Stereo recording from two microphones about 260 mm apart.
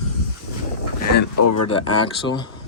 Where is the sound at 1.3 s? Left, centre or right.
Left.